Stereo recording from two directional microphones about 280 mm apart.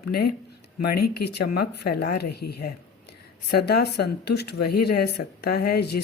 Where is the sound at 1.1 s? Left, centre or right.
Left.